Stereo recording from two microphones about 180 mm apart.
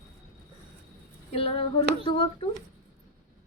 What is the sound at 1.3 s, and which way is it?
Female singing, 30° left (ahead or behind).